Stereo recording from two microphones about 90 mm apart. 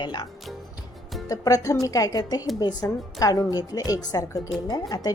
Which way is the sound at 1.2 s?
40° left (ahead or behind).